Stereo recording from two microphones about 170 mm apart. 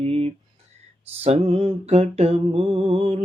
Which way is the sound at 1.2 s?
35° right (ahead or behind).